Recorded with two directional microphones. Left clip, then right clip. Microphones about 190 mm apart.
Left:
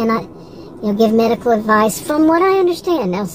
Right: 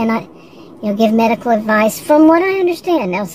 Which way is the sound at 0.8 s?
30° right (ahead or behind).